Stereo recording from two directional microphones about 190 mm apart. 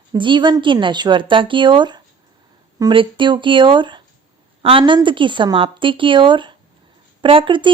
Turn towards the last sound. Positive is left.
turn(degrees=-25)  # may be behind; listen again after turning